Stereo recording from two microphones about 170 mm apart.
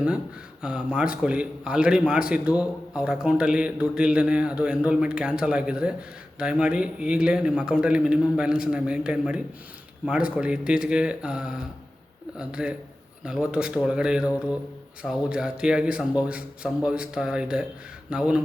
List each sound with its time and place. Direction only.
0.6 s a man's voice: 5° right (ahead or behind)